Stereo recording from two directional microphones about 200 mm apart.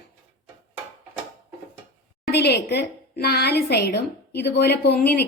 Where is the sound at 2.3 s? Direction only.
55° left (ahead or behind).